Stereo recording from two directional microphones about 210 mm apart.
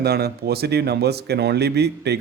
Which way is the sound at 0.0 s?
50° right (ahead or behind).